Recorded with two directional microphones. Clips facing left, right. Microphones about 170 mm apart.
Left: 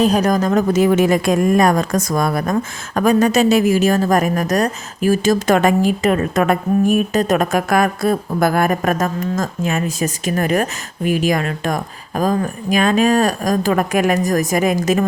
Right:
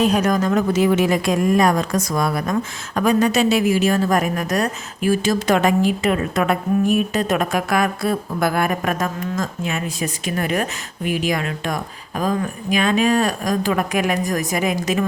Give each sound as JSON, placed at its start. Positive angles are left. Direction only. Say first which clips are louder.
{"t": 0.0, "sound": "a woman's voice", "louder": "left 2 dB", "side_deg": 35}